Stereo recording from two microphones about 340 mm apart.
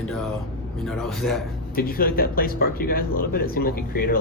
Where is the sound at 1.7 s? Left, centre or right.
Left.